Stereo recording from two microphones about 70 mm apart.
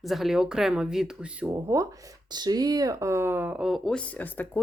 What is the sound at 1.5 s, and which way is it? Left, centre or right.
Speech, right.